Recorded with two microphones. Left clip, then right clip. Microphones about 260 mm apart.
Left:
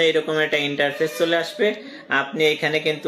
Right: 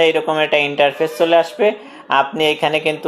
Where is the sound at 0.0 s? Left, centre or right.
Right.